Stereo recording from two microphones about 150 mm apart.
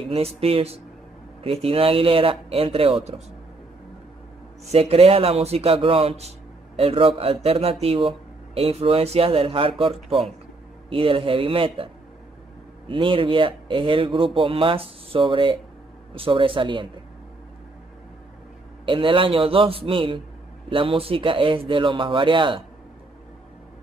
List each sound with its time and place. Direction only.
0.1 s speech: 40° right (ahead or behind)
4.6 s speech: 45° right (ahead or behind)
18.9 s speech: 35° right (ahead or behind)